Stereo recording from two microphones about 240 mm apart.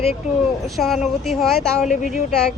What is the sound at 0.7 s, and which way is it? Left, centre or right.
Speech, centre.